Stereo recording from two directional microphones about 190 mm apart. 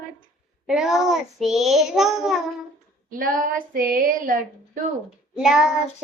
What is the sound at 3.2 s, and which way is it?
Female singing, 45° right (ahead or behind).